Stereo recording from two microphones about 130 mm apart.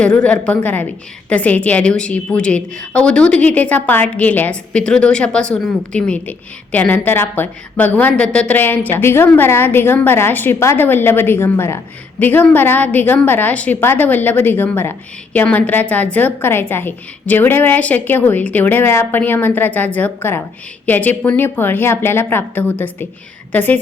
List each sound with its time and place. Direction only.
0.0 s a woman's voice: 10° left (ahead or behind)